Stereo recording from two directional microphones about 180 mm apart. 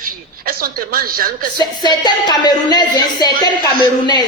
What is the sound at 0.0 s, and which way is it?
A woman's voice, 55° right (ahead or behind).